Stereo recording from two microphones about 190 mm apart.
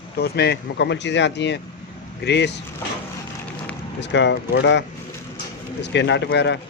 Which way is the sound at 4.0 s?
65° left (ahead or behind).